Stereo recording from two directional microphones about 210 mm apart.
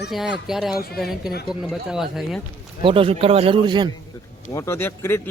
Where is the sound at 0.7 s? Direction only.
45° left (ahead or behind).